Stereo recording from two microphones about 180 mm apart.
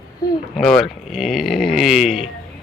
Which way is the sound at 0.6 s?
5° left (ahead or behind).